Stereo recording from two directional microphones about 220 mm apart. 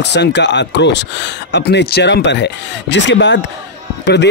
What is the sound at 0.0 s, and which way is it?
Speech, 50° left (ahead or behind).